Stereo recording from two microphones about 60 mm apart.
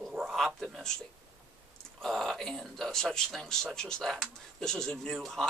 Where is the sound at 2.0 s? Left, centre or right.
Centre.